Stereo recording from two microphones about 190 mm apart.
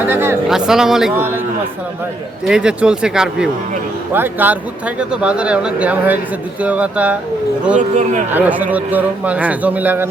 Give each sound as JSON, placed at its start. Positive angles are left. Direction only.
{"t": 0.0, "sound": "a sound", "side_deg": -10}
{"t": 0.7, "sound": "speech", "side_deg": 0}
{"t": 2.5, "sound": "speech", "side_deg": -5}
{"t": 7.8, "sound": "speech", "side_deg": -40}
{"t": 8.3, "sound": "speech", "side_deg": -10}